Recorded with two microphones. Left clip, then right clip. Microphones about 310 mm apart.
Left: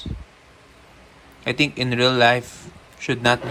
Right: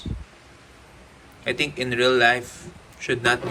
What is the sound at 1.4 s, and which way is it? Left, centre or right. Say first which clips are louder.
Speech: left 3 dB; centre.